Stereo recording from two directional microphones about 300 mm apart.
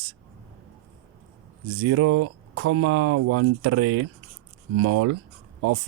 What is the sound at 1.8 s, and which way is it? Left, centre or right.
Speech, right.